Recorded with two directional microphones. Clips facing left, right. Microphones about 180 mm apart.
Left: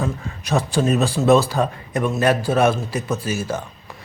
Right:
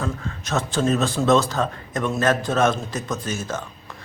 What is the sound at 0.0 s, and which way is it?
A man's voice, 10° left (ahead or behind).